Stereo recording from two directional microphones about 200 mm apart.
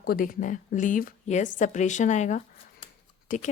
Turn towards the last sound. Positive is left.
turn(degrees=40)  # may be behind; listen again after turning